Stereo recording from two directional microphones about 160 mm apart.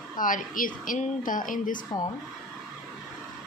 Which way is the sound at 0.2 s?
55° left (ahead or behind).